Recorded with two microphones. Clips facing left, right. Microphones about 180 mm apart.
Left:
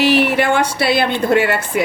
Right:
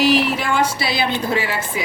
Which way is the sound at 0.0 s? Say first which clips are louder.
Left 3 dB; 65° left (ahead or behind).